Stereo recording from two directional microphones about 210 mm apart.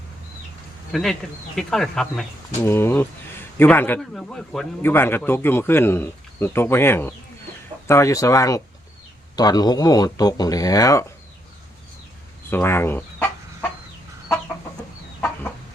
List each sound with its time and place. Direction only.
0.9 s a man's voice: centre (ahead or behind); by 11.0 s 15° left (ahead or behind)
12.5 s chicken: 10° left (ahead or behind)